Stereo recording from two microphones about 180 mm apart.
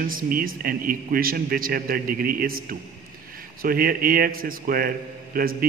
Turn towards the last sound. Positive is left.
turn(degrees=-55)  # may be behind; listen again after turning